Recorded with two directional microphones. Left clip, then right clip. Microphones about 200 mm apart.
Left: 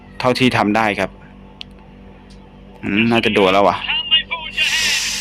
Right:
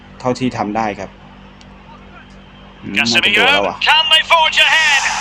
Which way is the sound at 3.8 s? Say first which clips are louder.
Right 7 dB; 50° right (ahead or behind).